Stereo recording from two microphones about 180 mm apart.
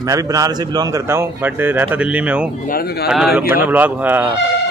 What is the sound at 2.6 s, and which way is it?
Speech, 55° left (ahead or behind).